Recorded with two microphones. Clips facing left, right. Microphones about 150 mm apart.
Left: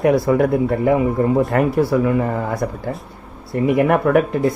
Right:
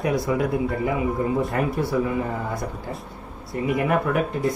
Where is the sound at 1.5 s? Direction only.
75° left (ahead or behind).